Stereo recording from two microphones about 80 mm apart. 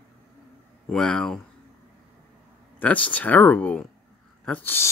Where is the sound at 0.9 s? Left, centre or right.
Centre.